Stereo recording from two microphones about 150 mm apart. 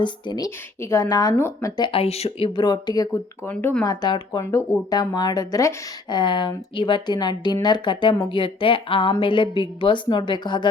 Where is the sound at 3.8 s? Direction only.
25° left (ahead or behind).